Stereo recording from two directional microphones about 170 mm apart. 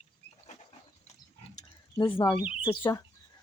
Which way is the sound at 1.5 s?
25° left (ahead or behind).